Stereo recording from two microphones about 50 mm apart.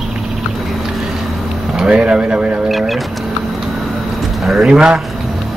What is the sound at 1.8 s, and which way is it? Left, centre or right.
Speech, centre.